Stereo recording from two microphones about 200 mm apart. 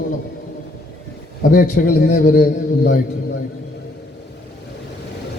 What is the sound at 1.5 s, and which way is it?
A man's voice, 40° left (ahead or behind).